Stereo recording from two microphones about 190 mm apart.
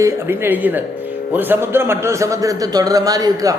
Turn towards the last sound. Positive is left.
turn(degrees=-20)  # may be behind; listen again after turning